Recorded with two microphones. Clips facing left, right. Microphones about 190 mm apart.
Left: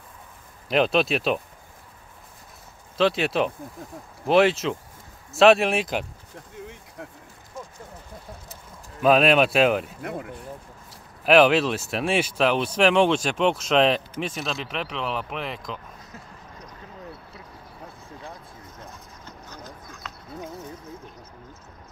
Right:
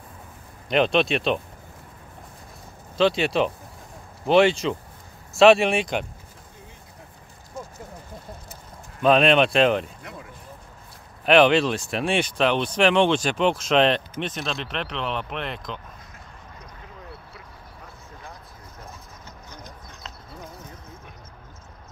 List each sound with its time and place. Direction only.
0.7 s speech: centre (ahead or behind)
3.0 s speech: centre (ahead or behind)
9.0 s speech: 5° left (ahead or behind)
11.2 s speech: 5° left (ahead or behind)